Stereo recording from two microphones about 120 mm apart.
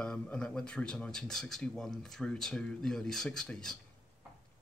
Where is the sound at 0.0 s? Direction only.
10° left (ahead or behind).